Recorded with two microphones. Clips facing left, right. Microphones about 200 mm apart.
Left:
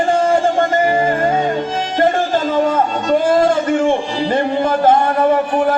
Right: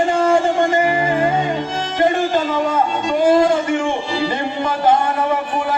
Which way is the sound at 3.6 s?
50° left (ahead or behind).